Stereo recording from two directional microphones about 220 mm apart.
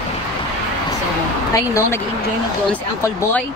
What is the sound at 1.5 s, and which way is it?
Speech, 15° left (ahead or behind).